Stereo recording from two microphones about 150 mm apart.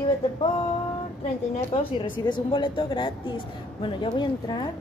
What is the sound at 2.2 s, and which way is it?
A woman's voice, 30° left (ahead or behind).